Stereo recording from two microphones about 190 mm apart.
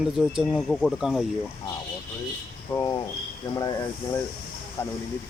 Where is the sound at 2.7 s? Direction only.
25° left (ahead or behind).